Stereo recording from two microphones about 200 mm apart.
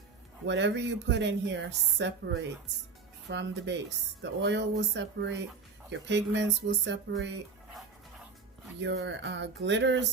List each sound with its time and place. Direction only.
0.4 s speech: 65° right (ahead or behind)
8.8 s speech: 60° right (ahead or behind)